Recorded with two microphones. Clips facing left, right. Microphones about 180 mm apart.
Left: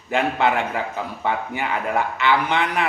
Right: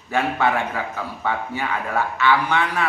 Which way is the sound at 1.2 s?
20° left (ahead or behind).